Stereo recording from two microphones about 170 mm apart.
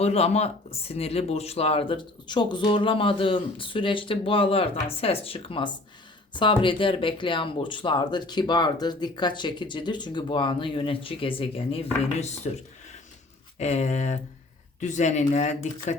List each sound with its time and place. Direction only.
0.0 s speech: 35° left (ahead or behind)
13.6 s speech: 40° left (ahead or behind)